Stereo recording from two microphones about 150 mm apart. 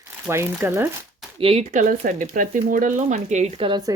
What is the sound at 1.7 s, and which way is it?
Speech, 55° right (ahead or behind).